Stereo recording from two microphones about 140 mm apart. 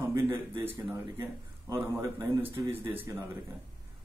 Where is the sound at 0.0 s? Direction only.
15° right (ahead or behind).